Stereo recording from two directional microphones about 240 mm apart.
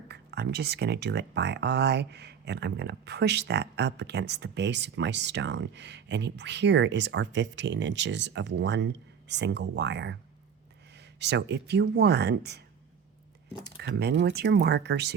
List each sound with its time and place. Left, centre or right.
0.1 s speech: right
13.7 s speech: right